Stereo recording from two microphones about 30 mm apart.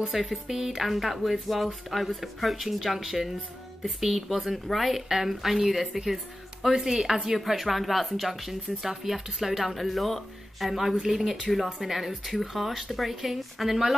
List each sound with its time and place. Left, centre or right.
0.1 s a woman's voice: centre
0.7 s a woman's voice: centre
6.7 s a woman's voice: centre